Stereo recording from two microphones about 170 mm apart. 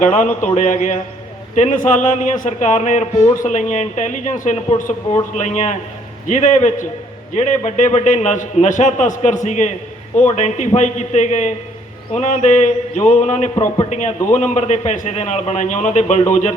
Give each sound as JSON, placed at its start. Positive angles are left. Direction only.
{"t": 0.0, "sound": "a man's voice", "side_deg": 45}